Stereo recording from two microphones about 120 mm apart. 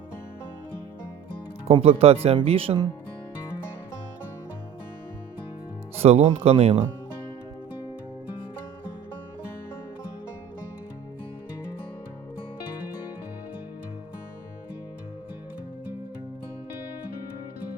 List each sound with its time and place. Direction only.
1.6 s speech: 55° right (ahead or behind)
6.0 s speech: 60° right (ahead or behind)